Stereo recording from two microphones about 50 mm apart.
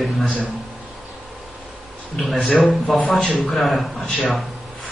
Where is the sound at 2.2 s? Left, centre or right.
Centre.